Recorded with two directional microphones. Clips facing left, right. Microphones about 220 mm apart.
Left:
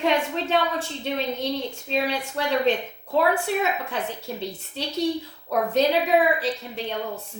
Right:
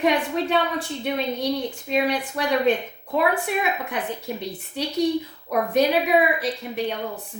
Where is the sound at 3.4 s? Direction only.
15° right (ahead or behind).